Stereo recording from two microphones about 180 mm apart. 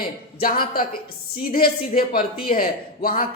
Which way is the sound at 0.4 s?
55° left (ahead or behind).